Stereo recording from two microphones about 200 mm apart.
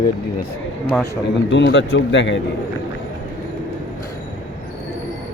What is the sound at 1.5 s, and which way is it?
Speech, 65° left (ahead or behind).